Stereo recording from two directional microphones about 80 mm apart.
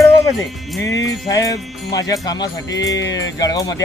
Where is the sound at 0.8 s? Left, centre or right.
Left.